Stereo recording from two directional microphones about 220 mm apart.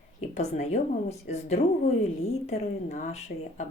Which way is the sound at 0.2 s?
30° left (ahead or behind).